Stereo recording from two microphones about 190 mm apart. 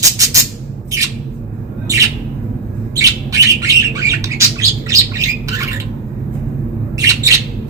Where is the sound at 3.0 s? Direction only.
15° right (ahead or behind).